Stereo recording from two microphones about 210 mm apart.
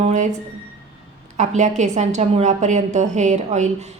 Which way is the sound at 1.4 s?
35° right (ahead or behind).